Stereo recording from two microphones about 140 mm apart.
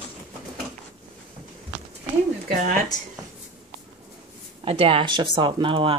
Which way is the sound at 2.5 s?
90° right.